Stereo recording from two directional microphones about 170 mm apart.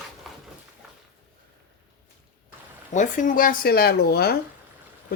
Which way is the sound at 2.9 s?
50° left (ahead or behind).